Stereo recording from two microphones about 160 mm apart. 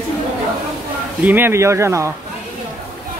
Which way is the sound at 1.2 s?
15° right (ahead or behind).